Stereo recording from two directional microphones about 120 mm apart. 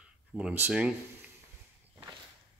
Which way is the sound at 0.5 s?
15° right (ahead or behind).